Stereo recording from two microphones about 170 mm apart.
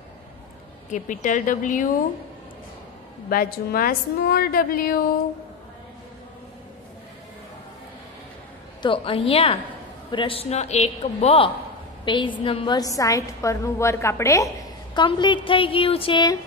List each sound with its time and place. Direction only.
0.9 s speech: 45° left (ahead or behind)
3.3 s a woman's voice: 60° left (ahead or behind)
8.8 s a man's voice: 30° left (ahead or behind)